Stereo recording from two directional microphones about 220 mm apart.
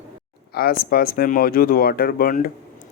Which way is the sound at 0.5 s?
45° left (ahead or behind).